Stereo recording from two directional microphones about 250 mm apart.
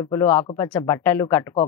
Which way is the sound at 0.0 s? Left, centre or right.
Centre.